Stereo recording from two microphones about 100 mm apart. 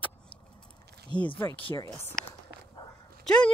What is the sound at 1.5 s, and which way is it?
Speech, 60° left (ahead or behind).